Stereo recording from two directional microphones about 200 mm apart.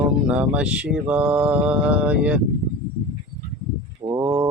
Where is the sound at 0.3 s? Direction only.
5° right (ahead or behind).